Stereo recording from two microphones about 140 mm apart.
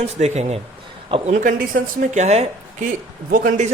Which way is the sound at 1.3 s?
80° right.